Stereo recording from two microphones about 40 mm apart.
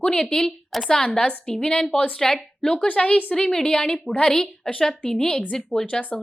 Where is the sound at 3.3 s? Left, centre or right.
Centre.